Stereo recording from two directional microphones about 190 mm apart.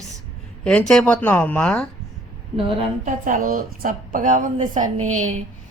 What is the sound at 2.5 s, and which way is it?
Speech, 30° right (ahead or behind).